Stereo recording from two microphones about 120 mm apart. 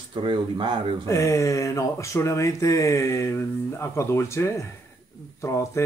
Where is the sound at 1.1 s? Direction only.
25° left (ahead or behind).